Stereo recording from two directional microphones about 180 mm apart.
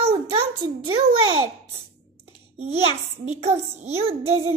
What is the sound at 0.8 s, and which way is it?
Speech, 30° right (ahead or behind).